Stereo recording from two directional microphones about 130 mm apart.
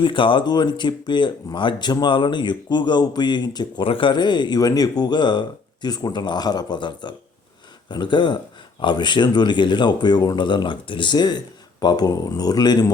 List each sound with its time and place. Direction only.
0.0 s speech: 40° left (ahead or behind)